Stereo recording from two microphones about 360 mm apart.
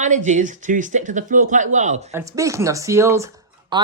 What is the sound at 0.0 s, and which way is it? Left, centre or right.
Speech, centre.